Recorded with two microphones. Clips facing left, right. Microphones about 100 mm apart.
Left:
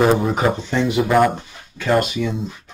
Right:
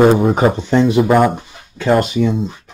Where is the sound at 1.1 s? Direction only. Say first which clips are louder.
Right 3 dB; 10° right (ahead or behind).